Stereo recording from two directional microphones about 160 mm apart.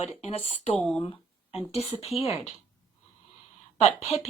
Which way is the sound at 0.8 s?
10° left (ahead or behind).